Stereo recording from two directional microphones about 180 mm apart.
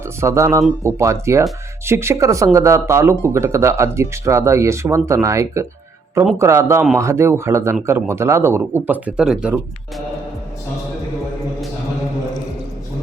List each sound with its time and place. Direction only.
0.2 s speech: 15° right (ahead or behind)